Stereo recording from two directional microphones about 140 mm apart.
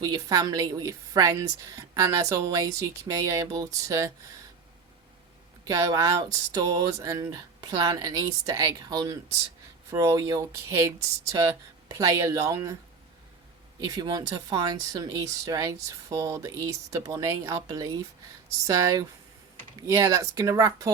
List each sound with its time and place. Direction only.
0.0 s speech: 30° right (ahead or behind)
5.6 s speech: 25° right (ahead or behind)
13.7 s speech: 30° right (ahead or behind)